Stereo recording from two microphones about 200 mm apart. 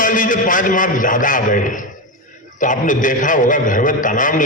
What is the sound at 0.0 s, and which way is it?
A man's voice, 40° left (ahead or behind).